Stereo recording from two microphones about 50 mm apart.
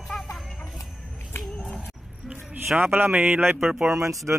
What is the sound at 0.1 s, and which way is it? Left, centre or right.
Music, centre.